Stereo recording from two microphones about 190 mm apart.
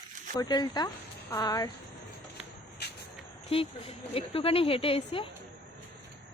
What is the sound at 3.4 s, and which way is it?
Speech, 30° left (ahead or behind).